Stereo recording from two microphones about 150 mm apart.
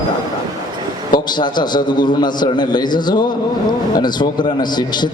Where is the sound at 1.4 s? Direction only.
30° left (ahead or behind).